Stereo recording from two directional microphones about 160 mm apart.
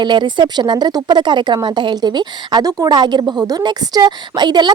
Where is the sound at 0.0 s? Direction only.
30° right (ahead or behind).